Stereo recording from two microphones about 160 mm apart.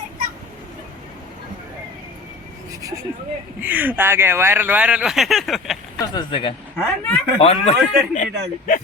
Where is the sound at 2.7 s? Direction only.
20° right (ahead or behind).